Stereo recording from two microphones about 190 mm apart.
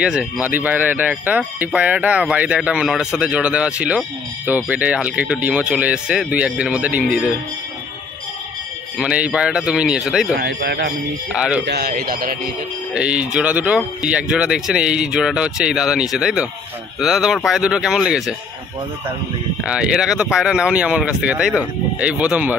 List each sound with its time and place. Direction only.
0.0 s speech: 5° right (ahead or behind)
8.9 s speech: 5° right (ahead or behind)
10.3 s a man's voice: 60° right (ahead or behind)
11.3 s speech: 5° right (ahead or behind)
11.6 s a man's voice: 60° right (ahead or behind)
12.9 s speech: 5° right (ahead or behind)
19.6 s speech: 5° right (ahead or behind)